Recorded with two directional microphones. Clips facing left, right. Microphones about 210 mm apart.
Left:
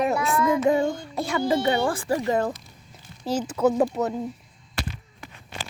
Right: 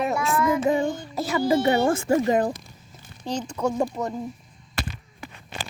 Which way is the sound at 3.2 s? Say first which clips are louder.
Left 4 dB; 5° left (ahead or behind).